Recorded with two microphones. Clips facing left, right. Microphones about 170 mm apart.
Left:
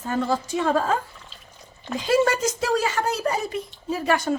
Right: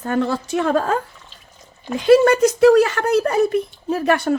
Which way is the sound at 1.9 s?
65° right (ahead or behind).